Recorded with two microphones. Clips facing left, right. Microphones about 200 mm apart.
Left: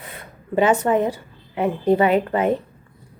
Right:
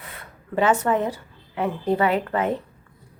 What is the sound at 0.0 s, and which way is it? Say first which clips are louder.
A woman's voice: left 3 dB; 20° left (ahead or behind).